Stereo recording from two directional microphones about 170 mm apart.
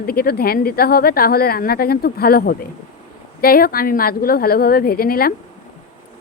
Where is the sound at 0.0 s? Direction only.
60° left (ahead or behind).